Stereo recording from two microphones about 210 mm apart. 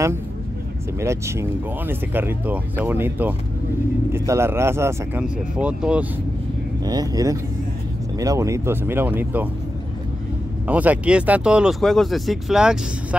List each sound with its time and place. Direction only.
1.0 s speech: 15° right (ahead or behind)
6.8 s speech: 20° right (ahead or behind)
10.7 s speech: 5° right (ahead or behind)